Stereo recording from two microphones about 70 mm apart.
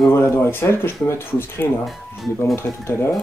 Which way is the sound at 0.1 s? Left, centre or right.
Left.